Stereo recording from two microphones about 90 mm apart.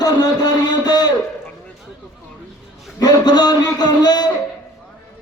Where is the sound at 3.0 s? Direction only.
50° left (ahead or behind).